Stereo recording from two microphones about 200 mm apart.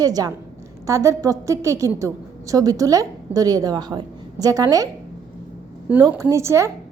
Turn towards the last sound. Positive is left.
turn(degrees=-15)  # may be behind; listen again after turning